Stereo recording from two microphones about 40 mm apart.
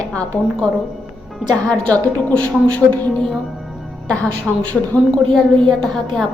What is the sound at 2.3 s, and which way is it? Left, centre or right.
Speech, left.